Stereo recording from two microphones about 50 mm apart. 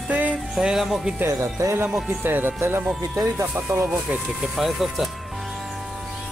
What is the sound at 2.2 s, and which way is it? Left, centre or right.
Speech, right.